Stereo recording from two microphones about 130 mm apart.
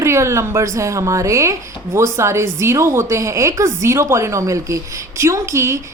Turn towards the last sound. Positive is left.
turn(degrees=-20)  # may be behind; listen again after turning